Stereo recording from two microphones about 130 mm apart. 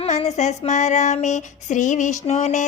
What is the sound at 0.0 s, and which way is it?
Child singing, 60° left (ahead or behind).